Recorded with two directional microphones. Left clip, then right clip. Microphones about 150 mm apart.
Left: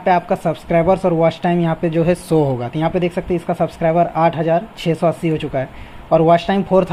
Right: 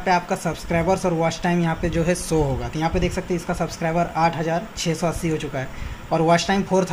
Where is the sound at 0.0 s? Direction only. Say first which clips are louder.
Left 5 dB; 45° left (ahead or behind).